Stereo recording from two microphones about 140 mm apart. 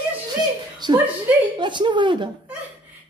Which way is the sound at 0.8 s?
30° right (ahead or behind).